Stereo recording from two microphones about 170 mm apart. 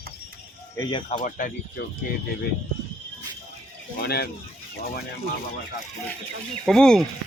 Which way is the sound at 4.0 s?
70° left (ahead or behind).